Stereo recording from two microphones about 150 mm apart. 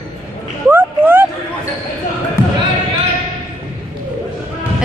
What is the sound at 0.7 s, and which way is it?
Speech, 15° right (ahead or behind).